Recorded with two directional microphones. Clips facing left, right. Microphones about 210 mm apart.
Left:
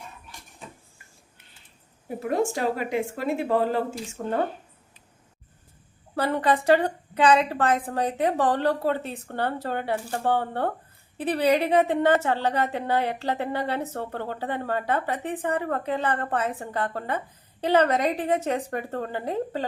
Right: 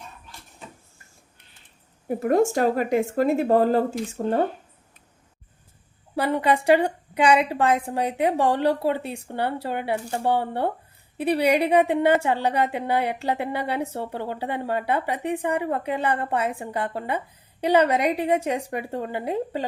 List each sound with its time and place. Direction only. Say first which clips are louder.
2.0 s a woman's voice: right 5 dB; 45° right (ahead or behind)
4.2 s speech: right 5 dB; 25° right (ahead or behind)
6.1 s a woman's voice: right 1 dB; 10° right (ahead or behind)